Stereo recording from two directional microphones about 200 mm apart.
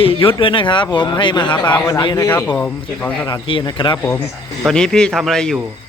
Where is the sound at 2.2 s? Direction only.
10° left (ahead or behind).